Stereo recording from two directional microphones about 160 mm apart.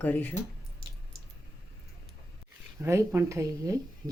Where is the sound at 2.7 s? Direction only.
15° right (ahead or behind).